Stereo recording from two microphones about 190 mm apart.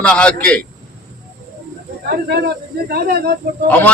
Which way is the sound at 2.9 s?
55° right (ahead or behind).